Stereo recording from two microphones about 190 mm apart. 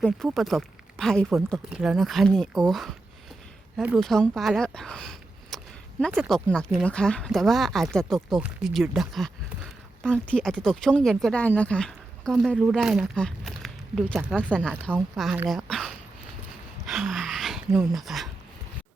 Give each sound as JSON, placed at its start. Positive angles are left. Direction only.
{"t": 0.0, "sound": "speech", "side_deg": 0}
{"t": 3.8, "sound": "speech", "side_deg": 0}
{"t": 16.8, "sound": "dog", "side_deg": 0}